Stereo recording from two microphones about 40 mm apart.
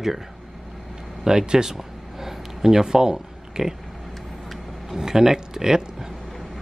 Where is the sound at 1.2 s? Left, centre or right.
Centre.